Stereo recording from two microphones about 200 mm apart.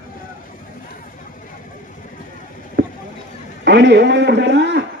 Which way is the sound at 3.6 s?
60° right (ahead or behind).